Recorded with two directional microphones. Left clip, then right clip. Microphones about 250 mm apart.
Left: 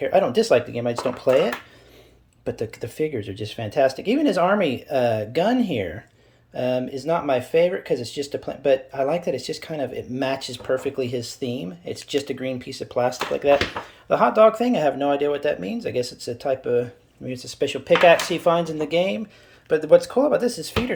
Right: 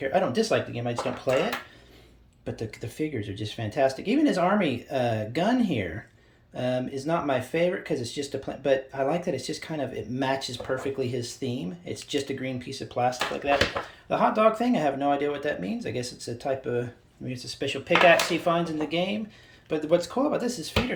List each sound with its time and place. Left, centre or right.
0.0 s speech: centre
2.4 s speech: centre